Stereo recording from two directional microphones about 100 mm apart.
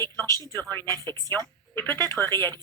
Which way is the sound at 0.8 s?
35° right (ahead or behind).